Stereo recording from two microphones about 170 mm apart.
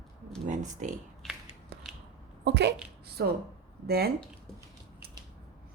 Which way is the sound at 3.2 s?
70° right (ahead or behind).